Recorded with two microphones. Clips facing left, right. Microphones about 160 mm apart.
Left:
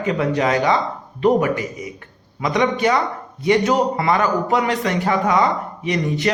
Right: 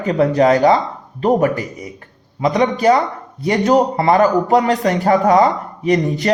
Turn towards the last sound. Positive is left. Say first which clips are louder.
# right 5 dB
turn(degrees=-40)  # may be behind; listen again after turning